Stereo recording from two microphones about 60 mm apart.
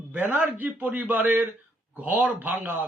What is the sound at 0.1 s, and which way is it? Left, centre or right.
Speech, right.